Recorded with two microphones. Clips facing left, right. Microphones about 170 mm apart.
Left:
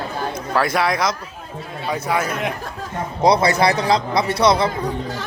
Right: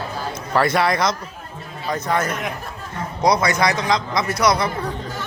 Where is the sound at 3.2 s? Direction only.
30° left (ahead or behind).